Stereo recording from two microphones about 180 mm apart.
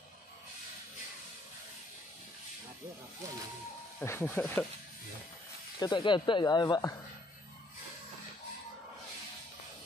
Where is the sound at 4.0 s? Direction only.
10° left (ahead or behind).